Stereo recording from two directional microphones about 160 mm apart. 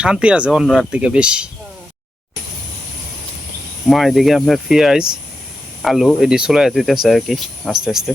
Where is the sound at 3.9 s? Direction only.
Centre (ahead or behind).